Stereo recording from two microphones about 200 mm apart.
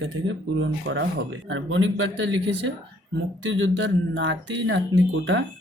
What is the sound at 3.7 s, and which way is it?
Speech, 65° right (ahead or behind).